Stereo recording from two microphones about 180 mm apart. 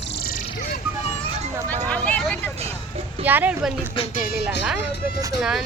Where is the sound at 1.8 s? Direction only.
10° left (ahead or behind).